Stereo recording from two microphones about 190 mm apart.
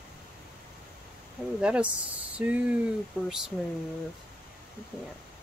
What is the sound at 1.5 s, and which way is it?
Speech, 5° right (ahead or behind).